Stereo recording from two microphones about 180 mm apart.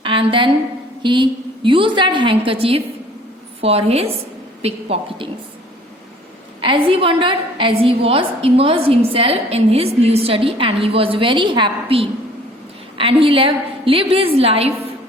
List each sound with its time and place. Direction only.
0.0 s a sound: 30° right (ahead or behind)
1.0 s a woman's voice: 25° right (ahead or behind)
6.6 s a woman's voice: 30° right (ahead or behind)